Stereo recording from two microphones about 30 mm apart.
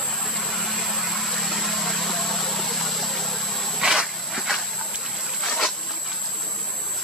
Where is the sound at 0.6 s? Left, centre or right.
Centre.